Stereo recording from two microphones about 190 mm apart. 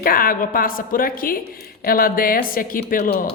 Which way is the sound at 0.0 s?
50° left (ahead or behind).